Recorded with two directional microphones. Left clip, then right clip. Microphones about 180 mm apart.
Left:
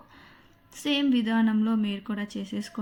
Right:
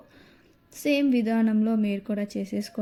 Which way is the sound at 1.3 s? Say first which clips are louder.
Right 1 dB; 15° right (ahead or behind).